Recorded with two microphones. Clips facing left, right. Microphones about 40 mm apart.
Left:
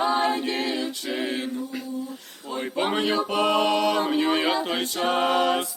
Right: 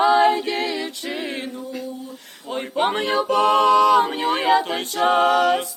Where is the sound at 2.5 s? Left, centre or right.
Right.